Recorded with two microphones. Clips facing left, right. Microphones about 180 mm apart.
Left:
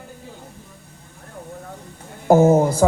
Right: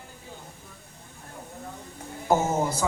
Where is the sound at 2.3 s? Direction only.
55° left (ahead or behind).